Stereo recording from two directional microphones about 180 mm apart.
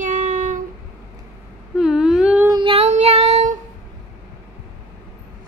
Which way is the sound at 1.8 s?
5° right (ahead or behind).